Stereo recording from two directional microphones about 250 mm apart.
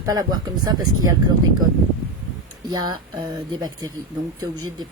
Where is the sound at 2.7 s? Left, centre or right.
Centre.